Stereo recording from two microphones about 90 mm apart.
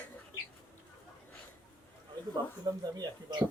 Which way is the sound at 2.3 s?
50° right (ahead or behind).